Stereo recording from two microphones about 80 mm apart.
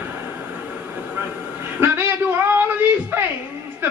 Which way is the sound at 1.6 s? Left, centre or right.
Right.